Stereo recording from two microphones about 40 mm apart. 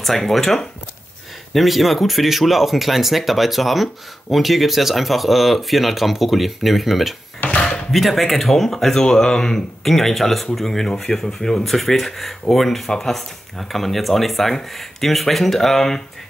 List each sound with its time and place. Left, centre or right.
0.0 s speech: centre
7.4 s a sound: left
7.9 s speech: centre
9.8 s speech: centre